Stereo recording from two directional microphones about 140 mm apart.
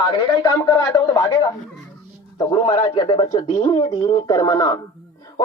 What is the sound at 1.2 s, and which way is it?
Speech, 30° left (ahead or behind).